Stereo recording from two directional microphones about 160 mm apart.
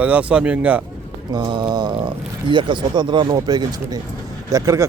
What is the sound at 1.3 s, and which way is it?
Speech, 25° right (ahead or behind).